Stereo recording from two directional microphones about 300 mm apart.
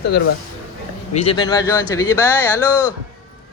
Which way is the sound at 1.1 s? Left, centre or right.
Centre.